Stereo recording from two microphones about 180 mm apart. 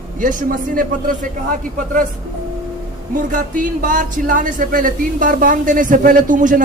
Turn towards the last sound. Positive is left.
turn(degrees=-45)  # may be behind; listen again after turning